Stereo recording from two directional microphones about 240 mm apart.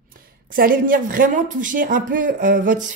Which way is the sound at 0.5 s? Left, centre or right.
Right.